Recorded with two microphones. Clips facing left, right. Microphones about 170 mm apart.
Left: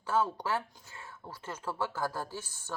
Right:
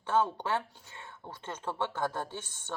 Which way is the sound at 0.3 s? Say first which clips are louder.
Right 1 dB; 25° right (ahead or behind).